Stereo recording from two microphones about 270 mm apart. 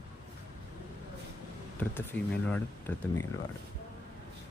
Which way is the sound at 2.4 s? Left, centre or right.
Centre.